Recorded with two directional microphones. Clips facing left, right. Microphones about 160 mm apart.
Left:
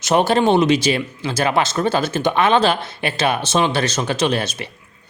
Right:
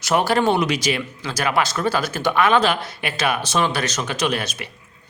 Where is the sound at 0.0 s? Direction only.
25° left (ahead or behind).